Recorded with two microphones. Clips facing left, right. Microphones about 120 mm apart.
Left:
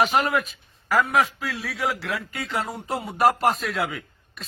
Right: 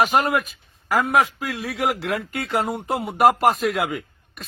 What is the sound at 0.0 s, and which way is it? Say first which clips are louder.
Speech: right 2 dB; 45° right (ahead or behind).